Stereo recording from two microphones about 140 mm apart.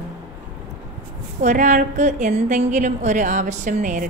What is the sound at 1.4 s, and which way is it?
A woman's voice, 60° right (ahead or behind).